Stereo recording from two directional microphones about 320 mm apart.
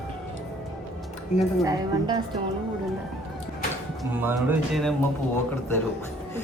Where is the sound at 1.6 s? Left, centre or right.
Centre.